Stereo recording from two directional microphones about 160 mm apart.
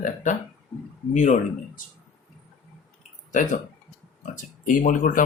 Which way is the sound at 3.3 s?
55° left (ahead or behind).